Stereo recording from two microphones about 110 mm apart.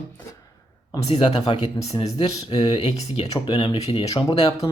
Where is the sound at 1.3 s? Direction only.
65° left (ahead or behind).